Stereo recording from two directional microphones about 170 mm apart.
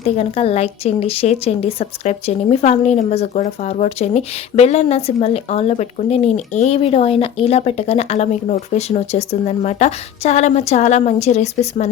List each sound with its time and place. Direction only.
0.0 s a woman's voice: 35° left (ahead or behind)